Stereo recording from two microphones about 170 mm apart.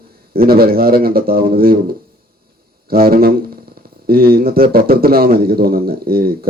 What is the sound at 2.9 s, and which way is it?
Speech, 60° right (ahead or behind).